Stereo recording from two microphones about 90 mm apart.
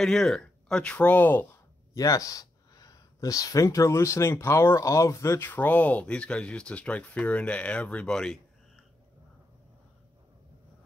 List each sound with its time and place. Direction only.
0.0 s speech: 5° left (ahead or behind); by 1.6 s 20° left (ahead or behind)
2.0 s speech: 40° left (ahead or behind); by 8.4 s 10° left (ahead or behind)